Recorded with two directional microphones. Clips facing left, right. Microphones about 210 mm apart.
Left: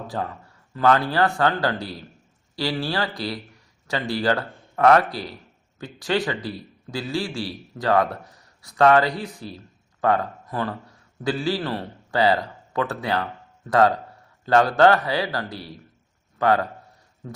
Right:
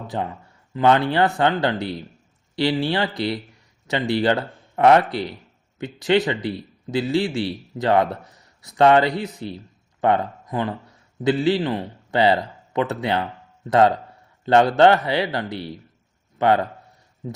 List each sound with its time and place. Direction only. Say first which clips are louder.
0.1 s a man's voice: right 3 dB; 20° right (ahead or behind)